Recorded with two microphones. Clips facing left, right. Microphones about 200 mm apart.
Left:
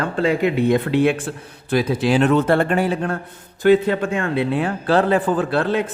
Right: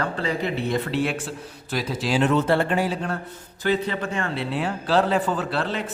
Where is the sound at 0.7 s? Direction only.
55° left (ahead or behind).